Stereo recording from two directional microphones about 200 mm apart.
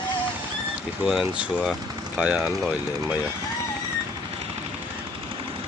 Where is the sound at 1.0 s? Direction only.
5° right (ahead or behind).